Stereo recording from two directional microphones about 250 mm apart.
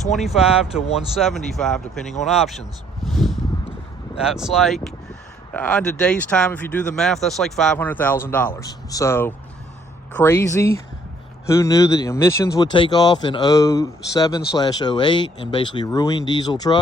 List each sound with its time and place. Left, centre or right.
0.1 s speech: centre